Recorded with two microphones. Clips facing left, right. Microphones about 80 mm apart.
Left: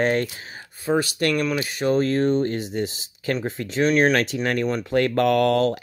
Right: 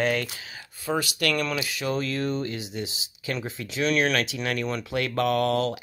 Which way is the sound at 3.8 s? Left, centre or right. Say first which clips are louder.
Left 5 dB; left.